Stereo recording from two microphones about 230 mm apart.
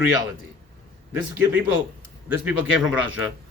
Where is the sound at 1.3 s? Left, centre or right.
Centre.